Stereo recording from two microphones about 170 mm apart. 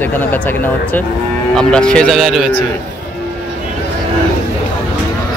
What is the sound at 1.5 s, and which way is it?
Speech, 5° left (ahead or behind).